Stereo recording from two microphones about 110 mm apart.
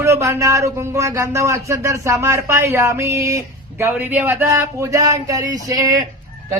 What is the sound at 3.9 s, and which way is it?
Speech, 15° right (ahead or behind).